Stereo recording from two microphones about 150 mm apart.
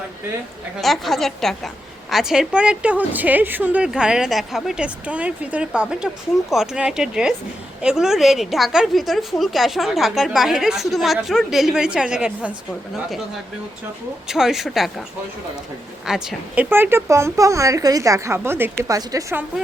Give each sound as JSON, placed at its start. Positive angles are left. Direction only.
{"t": 0.8, "sound": "a woman's voice", "side_deg": 0}
{"t": 14.3, "sound": "a woman's voice", "side_deg": -5}
{"t": 16.0, "sound": "a woman's voice", "side_deg": -5}